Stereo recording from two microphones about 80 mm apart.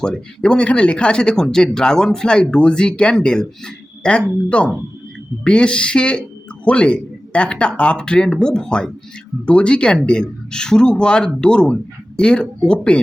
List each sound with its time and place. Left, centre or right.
0.4 s speech: centre
4.4 s speech: centre